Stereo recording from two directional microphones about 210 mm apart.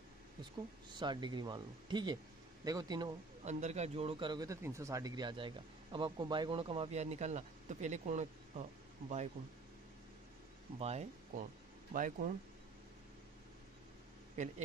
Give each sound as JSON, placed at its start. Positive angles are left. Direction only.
{"t": 0.4, "sound": "speech", "side_deg": -20}
{"t": 3.4, "sound": "speech", "side_deg": -35}
{"t": 10.8, "sound": "speech", "side_deg": -30}
{"t": 14.4, "sound": "speech", "side_deg": -35}